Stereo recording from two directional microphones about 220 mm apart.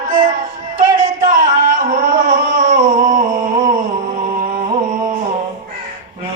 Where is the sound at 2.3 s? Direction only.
35° right (ahead or behind).